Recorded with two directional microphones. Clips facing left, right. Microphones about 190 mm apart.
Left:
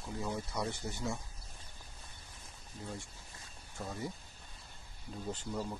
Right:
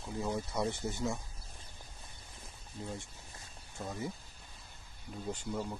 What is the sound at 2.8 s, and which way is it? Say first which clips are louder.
Speech: right 2 dB; 25° right (ahead or behind).